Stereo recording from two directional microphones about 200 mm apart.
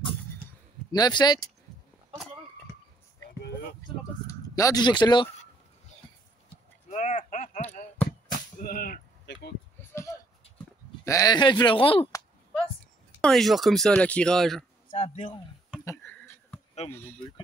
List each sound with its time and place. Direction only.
0.9 s speech: 20° left (ahead or behind)
4.3 s speech: 15° left (ahead or behind)
6.9 s a sound: 35° left (ahead or behind)
8.3 s whip: 45° left (ahead or behind)
9.8 s a sound: 15° left (ahead or behind)
11.1 s speech: 15° left (ahead or behind)
13.2 s speech: centre (ahead or behind)
14.9 s speech: 35° left (ahead or behind)
15.8 s a sound: 15° left (ahead or behind)